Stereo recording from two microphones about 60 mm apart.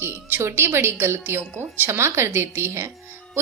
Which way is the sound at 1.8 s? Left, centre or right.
Right.